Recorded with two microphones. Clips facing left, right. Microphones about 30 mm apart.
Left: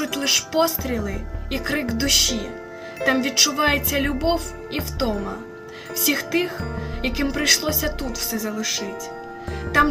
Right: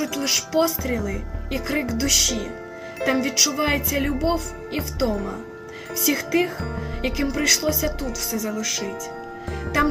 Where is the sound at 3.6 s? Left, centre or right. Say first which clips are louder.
Left 2 dB; left.